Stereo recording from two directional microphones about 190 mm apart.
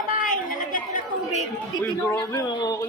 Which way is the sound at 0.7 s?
40° left (ahead or behind).